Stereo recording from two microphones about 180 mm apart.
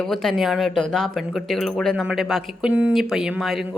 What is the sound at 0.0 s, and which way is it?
Speech, centre (ahead or behind).